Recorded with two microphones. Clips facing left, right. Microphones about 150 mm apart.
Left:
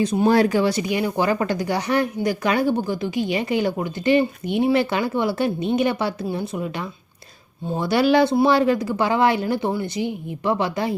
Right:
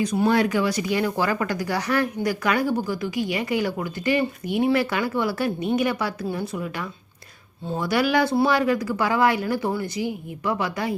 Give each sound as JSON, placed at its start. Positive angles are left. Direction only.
{"t": 0.0, "sound": "speech", "side_deg": 25}